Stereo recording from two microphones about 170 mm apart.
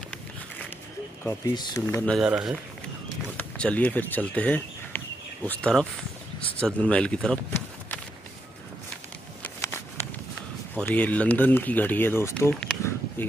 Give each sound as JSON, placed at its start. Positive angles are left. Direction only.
{"t": 1.2, "sound": "speech", "side_deg": 20}
{"t": 2.1, "sound": "speech", "side_deg": -5}
{"t": 9.4, "sound": "a sound", "side_deg": 15}
{"t": 10.8, "sound": "speech", "side_deg": 10}